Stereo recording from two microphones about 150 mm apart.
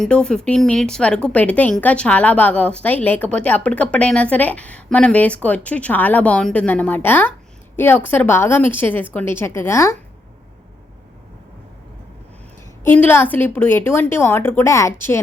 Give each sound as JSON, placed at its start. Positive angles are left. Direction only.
{"t": 0.0, "sound": "a woman's voice", "side_deg": 5}
{"t": 12.8, "sound": "a woman's voice", "side_deg": 10}